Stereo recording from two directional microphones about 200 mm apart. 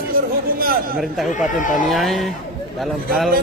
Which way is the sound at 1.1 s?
Centre (ahead or behind).